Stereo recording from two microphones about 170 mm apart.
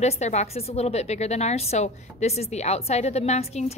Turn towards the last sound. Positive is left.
turn(degrees=40)  # may be behind; listen again after turning